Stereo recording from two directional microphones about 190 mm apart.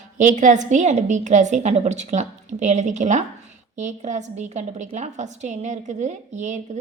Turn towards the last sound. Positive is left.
turn(degrees=-40)  # may be behind; listen again after turning